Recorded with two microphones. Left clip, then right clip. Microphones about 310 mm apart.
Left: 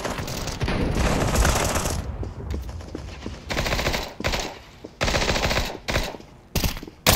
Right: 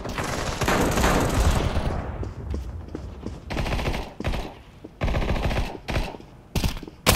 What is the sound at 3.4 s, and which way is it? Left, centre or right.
Machine gun, centre.